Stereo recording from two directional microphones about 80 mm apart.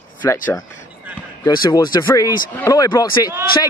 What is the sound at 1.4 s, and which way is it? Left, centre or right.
Speech, left.